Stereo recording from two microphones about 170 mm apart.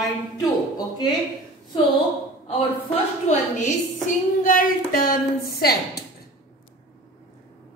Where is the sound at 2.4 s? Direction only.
40° left (ahead or behind); by 6.0 s 65° left (ahead or behind).